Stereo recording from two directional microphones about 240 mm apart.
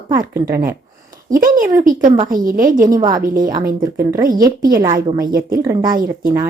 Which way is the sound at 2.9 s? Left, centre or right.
Centre.